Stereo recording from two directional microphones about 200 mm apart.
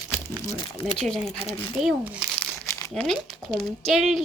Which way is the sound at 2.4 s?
5° left (ahead or behind).